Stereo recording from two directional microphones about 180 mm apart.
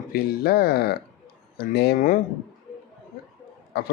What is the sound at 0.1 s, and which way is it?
Speech, 60° left (ahead or behind).